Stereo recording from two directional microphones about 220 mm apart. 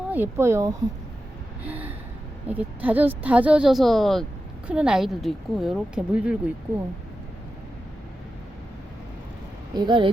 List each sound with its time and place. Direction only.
0.1 s speech: 10° right (ahead or behind)
1.6 s gasp: 5° right (ahead or behind)
2.5 s speech: 5° right (ahead or behind)
9.7 s speech: 20° right (ahead or behind)